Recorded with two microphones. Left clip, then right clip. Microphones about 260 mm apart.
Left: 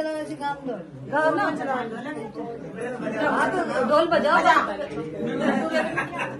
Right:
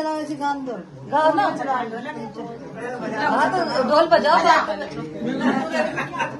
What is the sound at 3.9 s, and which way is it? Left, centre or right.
Speech, right.